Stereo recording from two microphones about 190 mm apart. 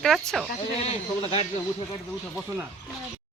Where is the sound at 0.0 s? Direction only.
Centre (ahead or behind).